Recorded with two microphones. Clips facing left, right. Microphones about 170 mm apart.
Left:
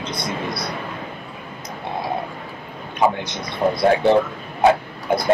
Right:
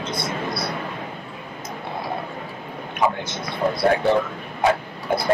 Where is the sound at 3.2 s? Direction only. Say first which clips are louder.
Left 2 dB; 20° left (ahead or behind).